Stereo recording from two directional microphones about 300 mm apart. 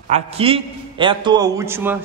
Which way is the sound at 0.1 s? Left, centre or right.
Centre.